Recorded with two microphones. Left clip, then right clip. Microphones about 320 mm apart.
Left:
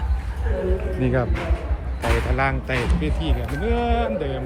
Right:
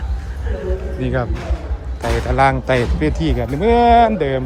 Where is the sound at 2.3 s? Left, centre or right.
Centre.